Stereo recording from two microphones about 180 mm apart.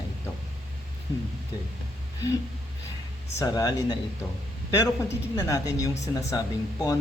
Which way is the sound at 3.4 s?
20° left (ahead or behind).